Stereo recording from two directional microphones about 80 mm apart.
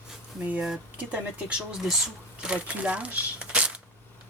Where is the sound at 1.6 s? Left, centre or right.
Centre.